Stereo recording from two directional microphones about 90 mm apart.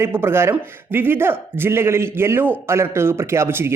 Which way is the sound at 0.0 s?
25° right (ahead or behind).